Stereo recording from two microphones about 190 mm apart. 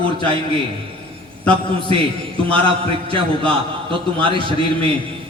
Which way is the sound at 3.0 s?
25° right (ahead or behind).